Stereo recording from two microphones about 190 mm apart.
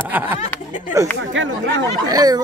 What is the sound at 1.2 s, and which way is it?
Speech, 85° right.